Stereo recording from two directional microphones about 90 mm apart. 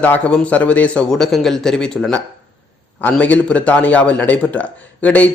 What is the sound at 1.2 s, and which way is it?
Speech, 5° left (ahead or behind).